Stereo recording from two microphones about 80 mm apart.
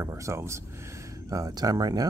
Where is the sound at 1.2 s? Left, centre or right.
Right.